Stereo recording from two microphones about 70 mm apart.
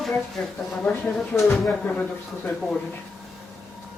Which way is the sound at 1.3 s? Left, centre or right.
Left.